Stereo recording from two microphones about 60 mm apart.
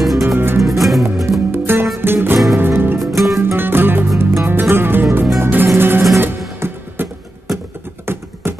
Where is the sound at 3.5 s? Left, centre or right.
Right.